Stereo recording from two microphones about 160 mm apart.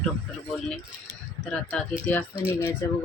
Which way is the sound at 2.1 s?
10° left (ahead or behind).